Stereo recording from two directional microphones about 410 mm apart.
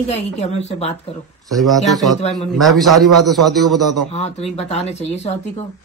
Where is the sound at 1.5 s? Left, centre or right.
Centre.